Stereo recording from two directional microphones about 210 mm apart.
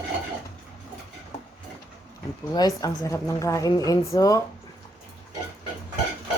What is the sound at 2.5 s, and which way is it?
A woman's voice, 15° left (ahead or behind).